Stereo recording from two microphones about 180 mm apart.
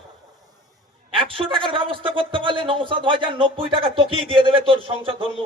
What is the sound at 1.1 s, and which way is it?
A man's voice, 30° right (ahead or behind).